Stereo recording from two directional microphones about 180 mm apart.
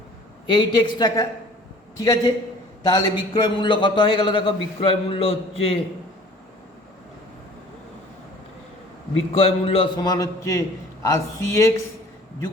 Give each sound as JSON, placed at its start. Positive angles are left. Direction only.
{"t": 0.4, "sound": "a man's voice", "side_deg": 25}
{"t": 9.3, "sound": "a man's voice", "side_deg": 30}